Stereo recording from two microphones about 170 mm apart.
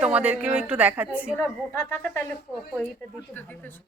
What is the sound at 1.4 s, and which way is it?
Speech, 15° left (ahead or behind).